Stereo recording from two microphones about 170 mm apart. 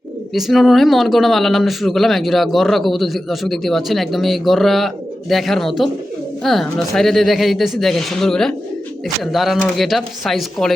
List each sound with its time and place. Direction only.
0.3 s speech: centre (ahead or behind)